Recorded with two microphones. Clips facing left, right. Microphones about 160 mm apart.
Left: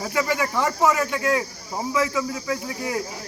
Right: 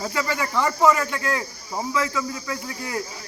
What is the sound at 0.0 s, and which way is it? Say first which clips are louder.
Speech: left 2 dB; 15° left (ahead or behind).